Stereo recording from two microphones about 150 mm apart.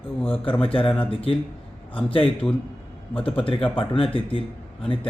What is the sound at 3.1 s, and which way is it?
A man's voice, 35° left (ahead or behind).